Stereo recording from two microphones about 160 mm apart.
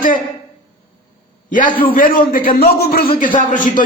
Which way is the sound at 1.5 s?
55° left (ahead or behind).